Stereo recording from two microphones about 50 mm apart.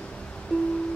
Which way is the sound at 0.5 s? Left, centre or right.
Left.